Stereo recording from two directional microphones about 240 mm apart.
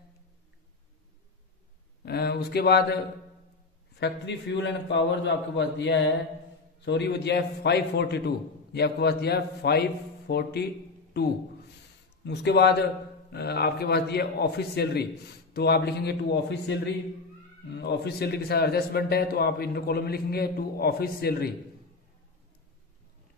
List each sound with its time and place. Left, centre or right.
2.0 s a man's voice: left
4.0 s a man's voice: left
12.3 s a man's voice: left